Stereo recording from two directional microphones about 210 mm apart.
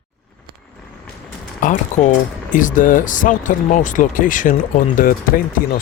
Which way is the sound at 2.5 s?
40° left (ahead or behind).